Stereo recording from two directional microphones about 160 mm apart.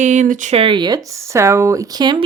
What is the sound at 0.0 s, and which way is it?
Speech, 50° right (ahead or behind).